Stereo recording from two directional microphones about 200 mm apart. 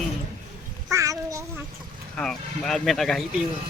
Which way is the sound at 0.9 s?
15° right (ahead or behind).